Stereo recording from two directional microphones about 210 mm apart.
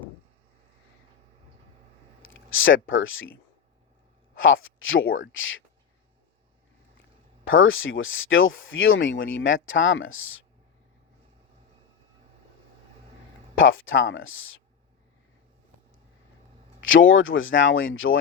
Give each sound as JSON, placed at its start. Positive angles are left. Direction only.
{"t": 2.2, "sound": "speech", "side_deg": 70}
{"t": 4.4, "sound": "speech", "side_deg": 65}
{"t": 7.4, "sound": "speech", "side_deg": 70}
{"t": 13.6, "sound": "speech", "side_deg": 70}
{"t": 16.8, "sound": "speech", "side_deg": 65}